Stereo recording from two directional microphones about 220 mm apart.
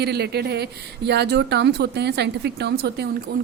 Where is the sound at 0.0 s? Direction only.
50° right (ahead or behind).